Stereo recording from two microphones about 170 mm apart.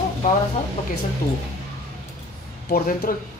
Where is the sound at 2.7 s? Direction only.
55° left (ahead or behind).